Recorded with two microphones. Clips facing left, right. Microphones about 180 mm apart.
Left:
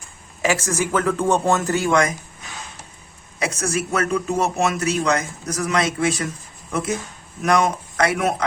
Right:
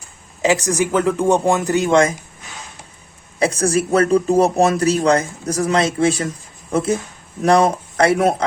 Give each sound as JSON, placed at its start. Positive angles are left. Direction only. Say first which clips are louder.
{"t": 0.4, "sound": "speech", "louder": "right 4 dB", "side_deg": -15}
{"t": 3.3, "sound": "speech", "louder": "right 7 dB", "side_deg": -30}